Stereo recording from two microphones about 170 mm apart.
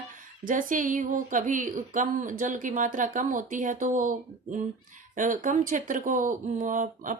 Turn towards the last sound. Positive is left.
turn(degrees=-50)  # may be behind; listen again after turning